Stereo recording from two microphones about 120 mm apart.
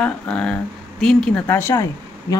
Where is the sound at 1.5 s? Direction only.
20° left (ahead or behind).